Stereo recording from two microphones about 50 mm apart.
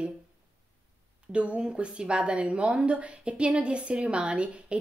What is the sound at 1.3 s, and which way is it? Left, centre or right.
A woman's voice, right.